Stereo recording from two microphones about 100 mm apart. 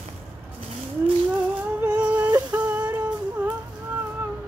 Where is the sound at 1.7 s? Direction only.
15° right (ahead or behind).